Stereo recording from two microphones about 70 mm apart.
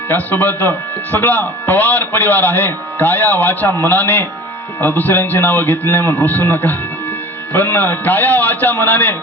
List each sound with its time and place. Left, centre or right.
0.1 s speech: left